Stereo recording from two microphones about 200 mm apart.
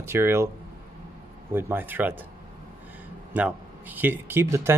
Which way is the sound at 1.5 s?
10° right (ahead or behind).